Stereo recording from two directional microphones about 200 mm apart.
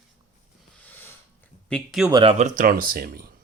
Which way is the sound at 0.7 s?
10° left (ahead or behind).